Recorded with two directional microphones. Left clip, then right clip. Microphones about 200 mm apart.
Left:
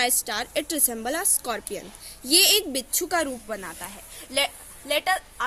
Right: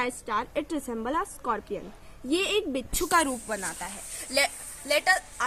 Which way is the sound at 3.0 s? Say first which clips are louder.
Right 2 dB; 55° right (ahead or behind).